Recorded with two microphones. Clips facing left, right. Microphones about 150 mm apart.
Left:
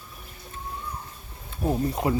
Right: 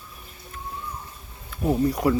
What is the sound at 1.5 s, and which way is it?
Speech, 25° left (ahead or behind).